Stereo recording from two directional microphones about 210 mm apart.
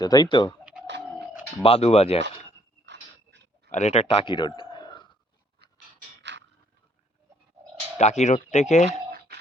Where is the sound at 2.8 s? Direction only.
55° right (ahead or behind).